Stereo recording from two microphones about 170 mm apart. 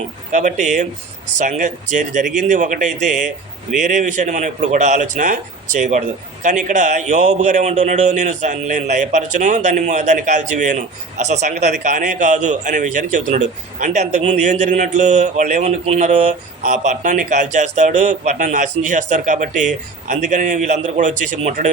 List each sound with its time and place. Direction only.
0.3 s a man's voice: 45° right (ahead or behind)
6.4 s a man's voice: 45° right (ahead or behind)